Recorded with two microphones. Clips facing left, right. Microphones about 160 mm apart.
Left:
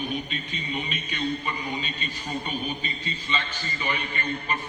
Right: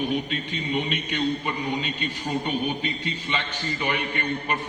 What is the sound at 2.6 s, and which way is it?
A man's voice, 70° right (ahead or behind).